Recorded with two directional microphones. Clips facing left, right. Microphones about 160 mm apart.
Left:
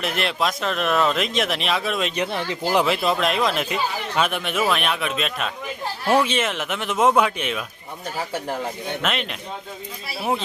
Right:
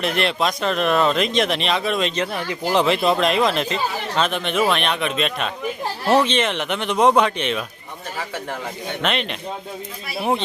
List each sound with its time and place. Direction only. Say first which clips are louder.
0.0 s speech: right 3 dB; centre (ahead or behind)
2.1 s speech: even; 20° left (ahead or behind)
2.6 s speech: right 2 dB; 5° left (ahead or behind)
9.0 s speech: right 5 dB; centre (ahead or behind)